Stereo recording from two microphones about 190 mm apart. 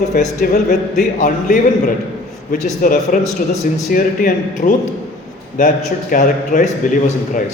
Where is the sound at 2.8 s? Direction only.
45° left (ahead or behind).